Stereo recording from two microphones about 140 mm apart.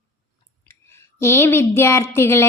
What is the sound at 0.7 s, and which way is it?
Speech, 20° left (ahead or behind).